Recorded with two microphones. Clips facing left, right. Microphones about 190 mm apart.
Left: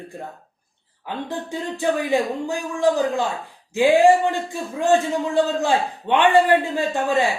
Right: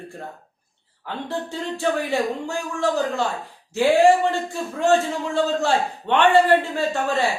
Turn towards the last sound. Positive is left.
turn(degrees=15)  # may be behind; listen again after turning